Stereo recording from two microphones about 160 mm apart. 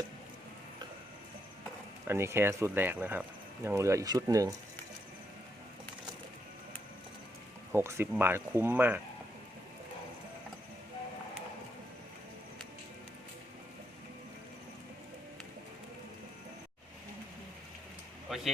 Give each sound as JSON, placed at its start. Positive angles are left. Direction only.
{"t": 2.0, "sound": "speech", "side_deg": -15}
{"t": 7.7, "sound": "speech", "side_deg": -15}
{"t": 18.3, "sound": "a sound", "side_deg": 0}